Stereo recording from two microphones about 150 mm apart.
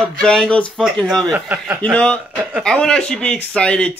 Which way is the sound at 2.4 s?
10° right (ahead or behind).